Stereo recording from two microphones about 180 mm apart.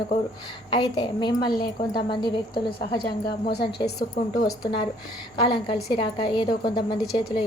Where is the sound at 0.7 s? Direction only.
30° left (ahead or behind).